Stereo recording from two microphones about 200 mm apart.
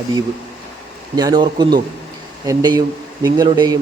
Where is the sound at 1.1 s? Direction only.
20° right (ahead or behind).